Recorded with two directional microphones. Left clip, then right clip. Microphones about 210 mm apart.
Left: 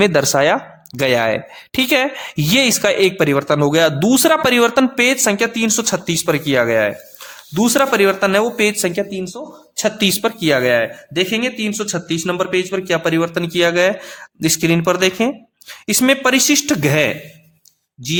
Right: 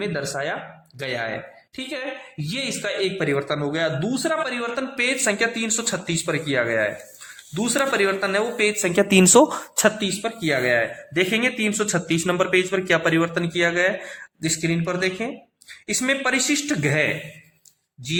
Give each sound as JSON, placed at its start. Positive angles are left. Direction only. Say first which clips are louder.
{"t": 0.0, "sound": "speech", "louder": "left 13 dB", "side_deg": 50}
{"t": 5.2, "sound": "speech", "louder": "left 5 dB", "side_deg": 30}
{"t": 9.0, "sound": "speech", "louder": "right 9 dB", "side_deg": -30}
{"t": 10.0, "sound": "a man's voice", "louder": "left 9 dB", "side_deg": 40}